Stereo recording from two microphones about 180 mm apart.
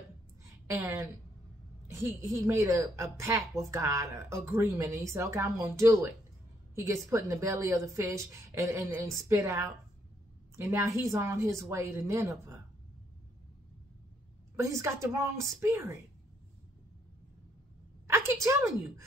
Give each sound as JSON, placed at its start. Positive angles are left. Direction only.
{"t": 0.7, "sound": "a woman's voice", "side_deg": -10}
{"t": 14.6, "sound": "a woman's voice", "side_deg": -15}
{"t": 18.4, "sound": "a woman's voice", "side_deg": -15}